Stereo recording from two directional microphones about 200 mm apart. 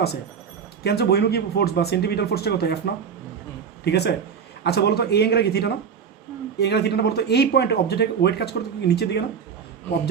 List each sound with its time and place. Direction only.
0.9 s a man's voice: 55° left (ahead or behind)